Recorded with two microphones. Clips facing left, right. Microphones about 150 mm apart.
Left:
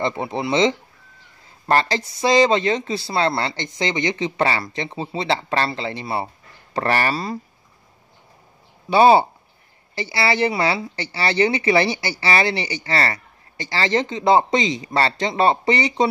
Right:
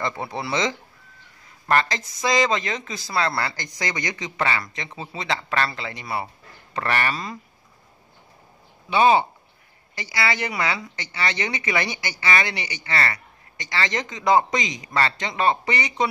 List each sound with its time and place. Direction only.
0.0 s a woman's voice: 25° left (ahead or behind)
8.9 s a woman's voice: 35° left (ahead or behind)